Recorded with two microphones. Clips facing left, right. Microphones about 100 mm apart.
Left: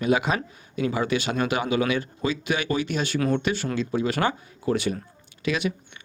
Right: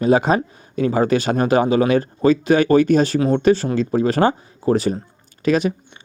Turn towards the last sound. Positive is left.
turn(degrees=-40)  # may be behind; listen again after turning